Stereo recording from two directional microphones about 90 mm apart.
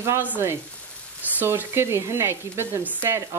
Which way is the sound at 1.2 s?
20° right (ahead or behind).